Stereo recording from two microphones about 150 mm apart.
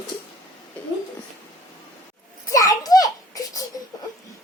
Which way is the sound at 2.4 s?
20° left (ahead or behind).